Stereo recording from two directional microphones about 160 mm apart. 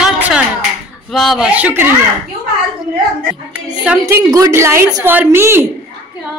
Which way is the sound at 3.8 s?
10° right (ahead or behind).